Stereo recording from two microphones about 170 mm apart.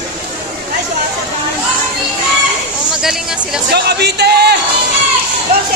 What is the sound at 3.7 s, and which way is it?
Speech, 75° right (ahead or behind).